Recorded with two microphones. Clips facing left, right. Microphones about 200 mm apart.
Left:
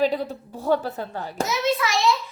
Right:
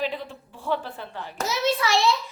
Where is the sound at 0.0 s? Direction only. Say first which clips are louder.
Left 7 dB; 40° left (ahead or behind).